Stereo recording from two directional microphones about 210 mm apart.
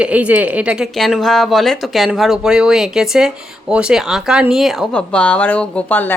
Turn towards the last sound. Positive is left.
turn(degrees=10)  # may be behind; listen again after turning